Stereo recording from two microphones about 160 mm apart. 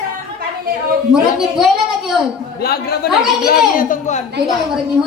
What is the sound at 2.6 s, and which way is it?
Speech, 75° left (ahead or behind).